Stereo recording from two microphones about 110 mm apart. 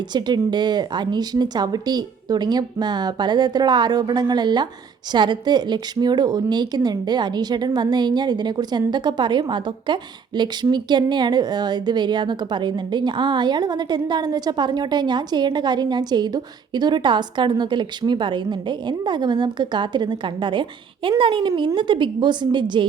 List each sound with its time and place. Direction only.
0.1 s a woman's voice: 40° right (ahead or behind)